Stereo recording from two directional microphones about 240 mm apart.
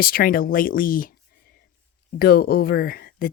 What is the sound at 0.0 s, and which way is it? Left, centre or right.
Speech, left.